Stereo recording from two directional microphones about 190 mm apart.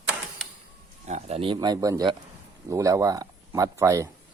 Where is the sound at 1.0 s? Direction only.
35° right (ahead or behind).